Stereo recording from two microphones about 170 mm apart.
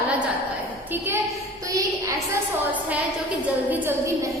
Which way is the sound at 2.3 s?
10° right (ahead or behind).